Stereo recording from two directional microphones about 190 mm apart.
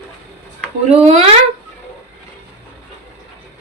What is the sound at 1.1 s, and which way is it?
Speech, 35° right (ahead or behind).